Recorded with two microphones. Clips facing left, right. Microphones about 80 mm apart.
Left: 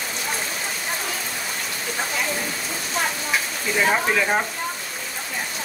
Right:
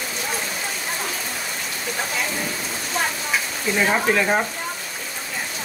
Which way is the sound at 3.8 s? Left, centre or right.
Centre.